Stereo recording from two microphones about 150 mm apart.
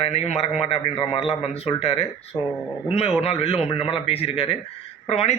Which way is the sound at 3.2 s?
45° left (ahead or behind).